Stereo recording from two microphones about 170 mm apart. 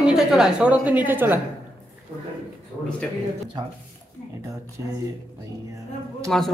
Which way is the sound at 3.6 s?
25° right (ahead or behind).